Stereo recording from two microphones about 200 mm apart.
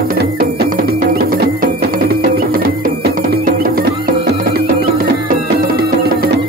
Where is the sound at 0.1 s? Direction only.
50° right (ahead or behind).